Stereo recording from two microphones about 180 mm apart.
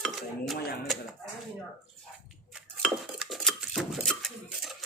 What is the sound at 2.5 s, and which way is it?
Dishes, 5° right (ahead or behind).